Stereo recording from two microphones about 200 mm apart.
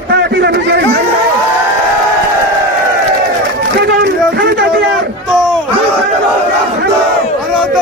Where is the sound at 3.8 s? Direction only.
55° right (ahead or behind).